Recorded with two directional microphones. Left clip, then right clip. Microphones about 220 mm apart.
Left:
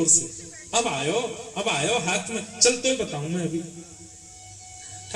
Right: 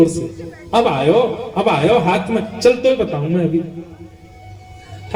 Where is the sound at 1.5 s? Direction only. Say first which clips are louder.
Right 10 dB; 40° left (ahead or behind).